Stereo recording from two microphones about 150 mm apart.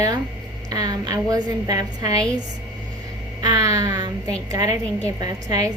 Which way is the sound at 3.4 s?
25° right (ahead or behind).